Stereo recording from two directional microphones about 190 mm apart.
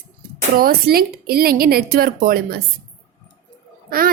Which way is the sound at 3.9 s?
50° right (ahead or behind).